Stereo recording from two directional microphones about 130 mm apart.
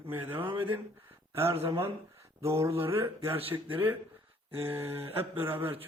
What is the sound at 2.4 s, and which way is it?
Speech, 20° right (ahead or behind).